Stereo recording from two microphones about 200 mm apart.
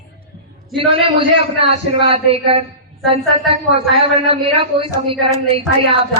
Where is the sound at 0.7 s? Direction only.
25° right (ahead or behind).